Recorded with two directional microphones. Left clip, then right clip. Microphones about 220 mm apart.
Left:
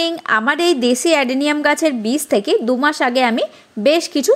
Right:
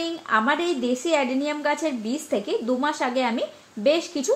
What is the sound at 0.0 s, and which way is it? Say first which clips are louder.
A woman's voice: left 6 dB; 35° left (ahead or behind).